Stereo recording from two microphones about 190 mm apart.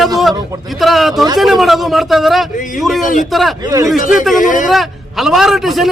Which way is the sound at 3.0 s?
45° left (ahead or behind).